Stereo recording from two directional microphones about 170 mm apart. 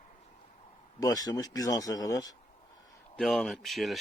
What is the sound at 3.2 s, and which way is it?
Speech, centre (ahead or behind).